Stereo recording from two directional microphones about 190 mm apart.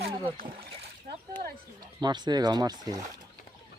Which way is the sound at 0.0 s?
30° right (ahead or behind).